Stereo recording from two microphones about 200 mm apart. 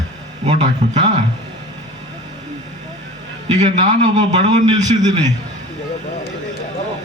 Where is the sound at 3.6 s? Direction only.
35° right (ahead or behind).